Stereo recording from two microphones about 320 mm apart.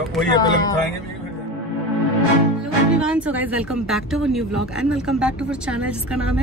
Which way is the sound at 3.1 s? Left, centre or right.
Centre.